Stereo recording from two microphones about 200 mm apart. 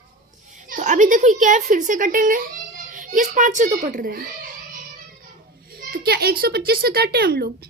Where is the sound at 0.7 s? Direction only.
40° right (ahead or behind).